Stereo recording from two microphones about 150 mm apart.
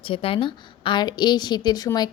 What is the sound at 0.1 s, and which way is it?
Speech, 35° left (ahead or behind).